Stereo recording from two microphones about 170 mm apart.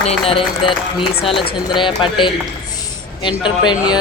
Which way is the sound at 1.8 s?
30° left (ahead or behind).